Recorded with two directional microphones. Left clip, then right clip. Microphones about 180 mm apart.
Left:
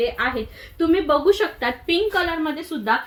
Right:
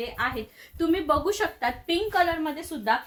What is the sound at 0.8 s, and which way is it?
A woman's voice, 20° right (ahead or behind).